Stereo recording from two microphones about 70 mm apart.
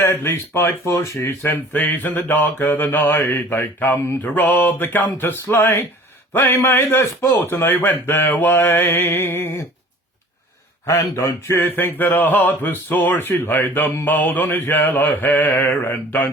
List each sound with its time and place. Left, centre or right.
0.0 s a man's voice: left
11.0 s speech: left
11.6 s speech: left